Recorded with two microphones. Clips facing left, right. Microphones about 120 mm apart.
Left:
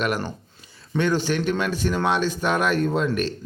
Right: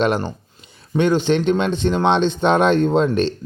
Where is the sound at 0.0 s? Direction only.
25° right (ahead or behind).